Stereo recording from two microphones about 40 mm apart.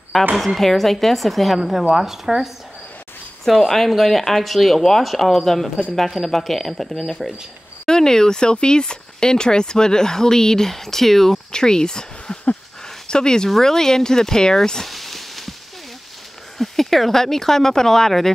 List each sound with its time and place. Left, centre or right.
0.4 s speech: centre
7.2 s speech: centre
7.8 s speech: centre
11.5 s speech: centre
14.9 s a sound: centre
16.5 s speech: centre